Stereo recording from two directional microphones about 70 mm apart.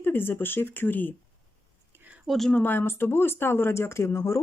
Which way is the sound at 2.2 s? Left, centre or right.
Centre.